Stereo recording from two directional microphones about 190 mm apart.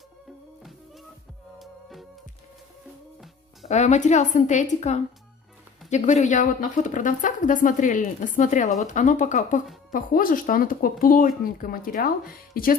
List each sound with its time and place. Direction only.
1.6 s music: centre (ahead or behind)
3.6 s a woman's voice: 35° left (ahead or behind)